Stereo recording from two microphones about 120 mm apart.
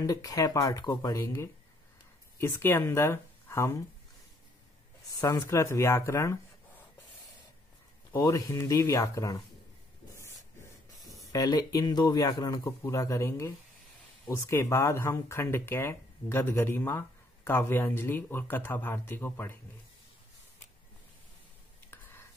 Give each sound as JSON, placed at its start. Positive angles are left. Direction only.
{"t": 0.0, "sound": "speech", "side_deg": 30}
{"t": 5.2, "sound": "speech", "side_deg": 25}
{"t": 8.1, "sound": "speech", "side_deg": 25}
{"t": 11.3, "sound": "speech", "side_deg": 30}